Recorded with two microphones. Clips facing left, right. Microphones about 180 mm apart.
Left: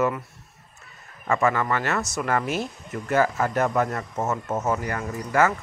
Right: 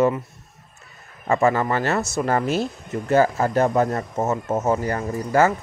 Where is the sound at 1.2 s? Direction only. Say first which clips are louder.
Right 3 dB; 30° right (ahead or behind).